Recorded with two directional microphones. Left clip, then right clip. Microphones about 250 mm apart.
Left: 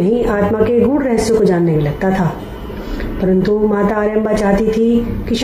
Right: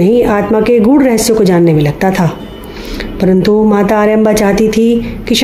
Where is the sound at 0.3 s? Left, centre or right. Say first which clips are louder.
Right 4 dB; right.